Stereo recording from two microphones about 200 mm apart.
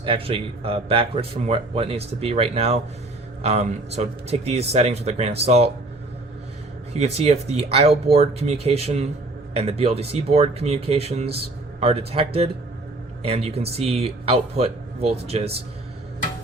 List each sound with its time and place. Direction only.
0.0 s a man's voice: 25° right (ahead or behind)
6.9 s a man's voice: 30° right (ahead or behind)